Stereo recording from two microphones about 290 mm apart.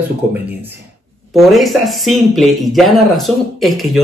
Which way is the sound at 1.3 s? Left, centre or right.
Centre.